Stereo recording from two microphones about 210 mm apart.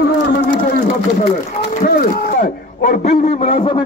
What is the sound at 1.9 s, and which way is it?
A man's voice, 40° left (ahead or behind).